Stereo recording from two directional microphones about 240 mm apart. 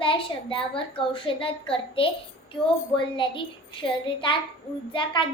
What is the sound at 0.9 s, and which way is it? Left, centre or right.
A child's voice, left.